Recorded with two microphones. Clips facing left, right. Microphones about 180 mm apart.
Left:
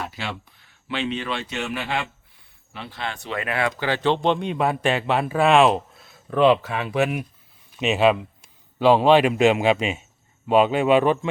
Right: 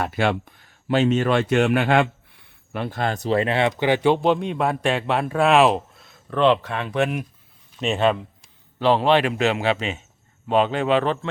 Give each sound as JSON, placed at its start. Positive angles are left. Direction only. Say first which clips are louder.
{"t": 0.0, "sound": "a man's voice", "louder": "right 9 dB", "side_deg": -55}